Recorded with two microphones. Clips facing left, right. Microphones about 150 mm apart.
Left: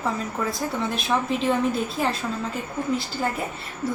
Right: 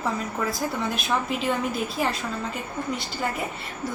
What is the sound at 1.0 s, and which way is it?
Speech, centre (ahead or behind).